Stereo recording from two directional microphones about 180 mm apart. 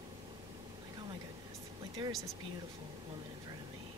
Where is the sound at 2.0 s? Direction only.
30° right (ahead or behind).